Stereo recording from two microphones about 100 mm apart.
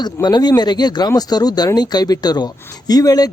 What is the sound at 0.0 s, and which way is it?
Speech, 45° left (ahead or behind).